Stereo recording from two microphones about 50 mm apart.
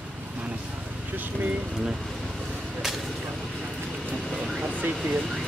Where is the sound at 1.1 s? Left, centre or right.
Right.